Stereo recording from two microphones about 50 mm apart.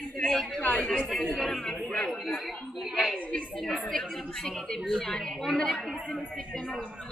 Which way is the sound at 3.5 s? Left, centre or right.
Centre.